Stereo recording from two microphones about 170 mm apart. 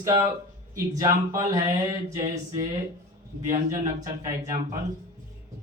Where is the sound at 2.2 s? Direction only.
45° right (ahead or behind).